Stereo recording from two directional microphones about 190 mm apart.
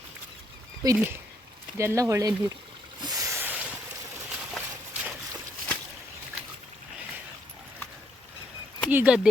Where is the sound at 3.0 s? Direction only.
20° right (ahead or behind).